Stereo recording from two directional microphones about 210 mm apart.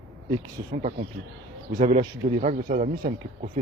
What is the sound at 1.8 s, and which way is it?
Speech, 35° right (ahead or behind).